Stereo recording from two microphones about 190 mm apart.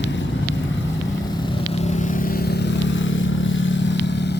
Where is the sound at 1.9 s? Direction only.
40° left (ahead or behind).